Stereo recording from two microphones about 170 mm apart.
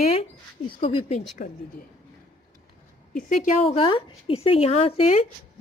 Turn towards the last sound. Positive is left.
turn(degrees=35)  # may be behind; listen again after turning